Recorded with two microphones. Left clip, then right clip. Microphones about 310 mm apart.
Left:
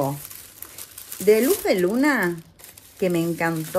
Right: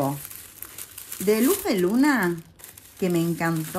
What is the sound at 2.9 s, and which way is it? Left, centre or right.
Speech, centre.